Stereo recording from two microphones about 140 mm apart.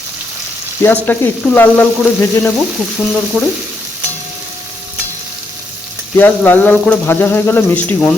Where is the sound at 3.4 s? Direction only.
Centre (ahead or behind).